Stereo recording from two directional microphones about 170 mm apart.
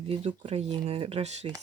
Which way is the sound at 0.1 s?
40° right (ahead or behind).